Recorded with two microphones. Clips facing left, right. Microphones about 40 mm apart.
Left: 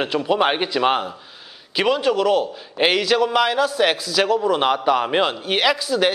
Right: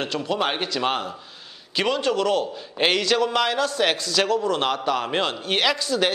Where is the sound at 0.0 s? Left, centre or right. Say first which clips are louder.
Left 5 dB; centre.